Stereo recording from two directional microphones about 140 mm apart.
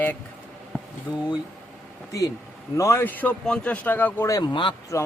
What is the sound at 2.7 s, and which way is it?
Speech, 20° left (ahead or behind).